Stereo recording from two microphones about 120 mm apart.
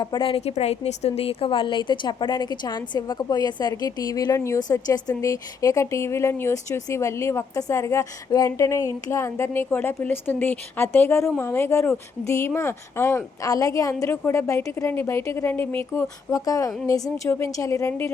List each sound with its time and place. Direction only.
0.0 s a woman's voice: 40° left (ahead or behind); by 18.1 s 20° left (ahead or behind)